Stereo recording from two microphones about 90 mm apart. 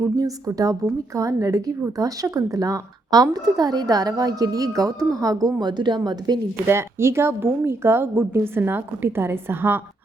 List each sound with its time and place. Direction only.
0.2 s a woman's voice: 40° right (ahead or behind)
6.7 s speech: 30° right (ahead or behind)